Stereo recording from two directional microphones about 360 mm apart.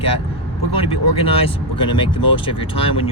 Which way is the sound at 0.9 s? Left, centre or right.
Centre.